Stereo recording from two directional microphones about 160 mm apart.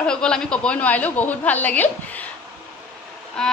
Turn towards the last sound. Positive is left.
turn(degrees=5)  # may be behind; listen again after turning